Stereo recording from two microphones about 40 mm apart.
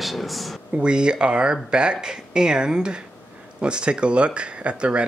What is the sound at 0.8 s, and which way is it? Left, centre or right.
Speech, right.